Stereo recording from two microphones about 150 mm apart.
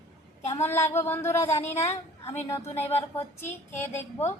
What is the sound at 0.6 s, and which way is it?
A woman's voice, 15° left (ahead or behind).